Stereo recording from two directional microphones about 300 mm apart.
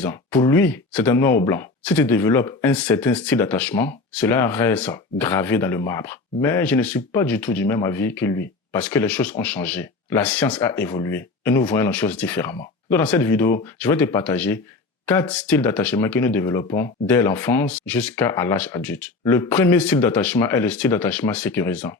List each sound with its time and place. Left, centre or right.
0.0 s speech: centre